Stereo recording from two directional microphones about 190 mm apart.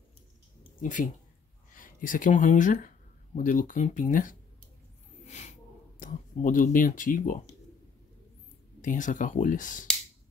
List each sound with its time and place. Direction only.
0.8 s speech: 45° left (ahead or behind)
8.8 s speech: 40° left (ahead or behind)